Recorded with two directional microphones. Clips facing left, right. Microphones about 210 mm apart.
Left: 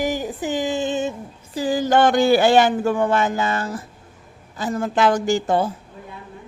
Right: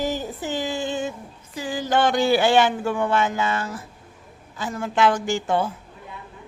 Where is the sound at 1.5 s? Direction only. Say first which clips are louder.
Left 5 dB; 40° left (ahead or behind).